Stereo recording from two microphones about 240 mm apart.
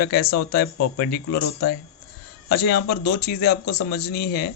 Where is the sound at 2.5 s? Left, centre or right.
Left.